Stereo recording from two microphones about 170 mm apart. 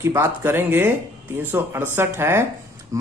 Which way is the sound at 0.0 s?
15° right (ahead or behind).